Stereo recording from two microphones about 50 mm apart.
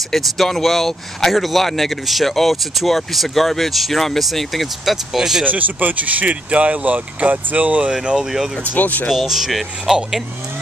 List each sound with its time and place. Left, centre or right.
0.1 s speech: centre
5.4 s speech: right
7.9 s speech: centre
8.7 s speech: left
9.1 s speech: centre